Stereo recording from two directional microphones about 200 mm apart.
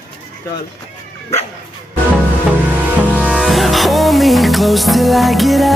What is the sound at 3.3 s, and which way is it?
Music, centre (ahead or behind).